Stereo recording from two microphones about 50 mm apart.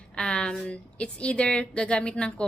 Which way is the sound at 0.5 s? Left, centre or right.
Centre.